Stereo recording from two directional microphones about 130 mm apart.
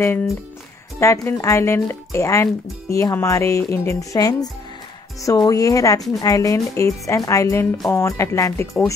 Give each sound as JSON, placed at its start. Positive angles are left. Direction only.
{"t": 0.9, "sound": "speech", "side_deg": 20}